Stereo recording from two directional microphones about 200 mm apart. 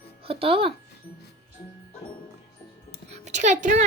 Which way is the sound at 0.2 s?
30° right (ahead or behind).